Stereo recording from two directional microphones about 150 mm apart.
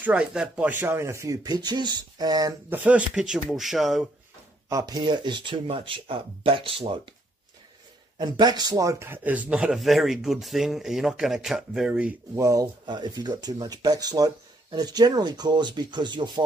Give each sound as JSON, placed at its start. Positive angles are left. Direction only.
{"t": 0.0, "sound": "speech", "side_deg": -5}
{"t": 2.7, "sound": "a man's voice", "side_deg": -10}
{"t": 4.6, "sound": "speech", "side_deg": -25}
{"t": 8.2, "sound": "a man's voice", "side_deg": -25}
{"t": 12.4, "sound": "speech", "side_deg": -20}